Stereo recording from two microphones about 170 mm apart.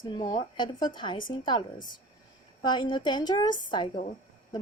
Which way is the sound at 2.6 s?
25° left (ahead or behind).